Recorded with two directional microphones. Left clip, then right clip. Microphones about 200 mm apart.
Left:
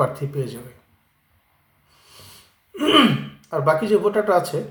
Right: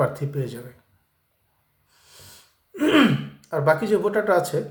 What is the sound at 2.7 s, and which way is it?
A man's voice, 5° right (ahead or behind).